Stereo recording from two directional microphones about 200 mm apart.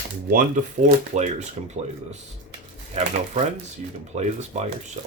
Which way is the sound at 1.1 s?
35° right (ahead or behind).